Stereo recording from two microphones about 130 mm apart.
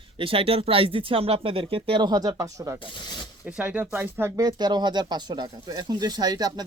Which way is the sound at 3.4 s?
10° right (ahead or behind).